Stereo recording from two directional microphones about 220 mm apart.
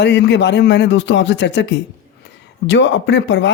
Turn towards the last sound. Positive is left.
turn(degrees=55)  # may be behind; listen again after turning